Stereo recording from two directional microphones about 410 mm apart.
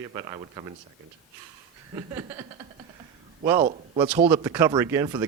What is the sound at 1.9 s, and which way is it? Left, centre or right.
Speech, centre.